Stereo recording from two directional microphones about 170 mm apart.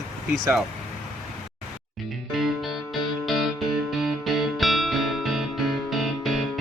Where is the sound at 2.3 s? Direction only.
Centre (ahead or behind).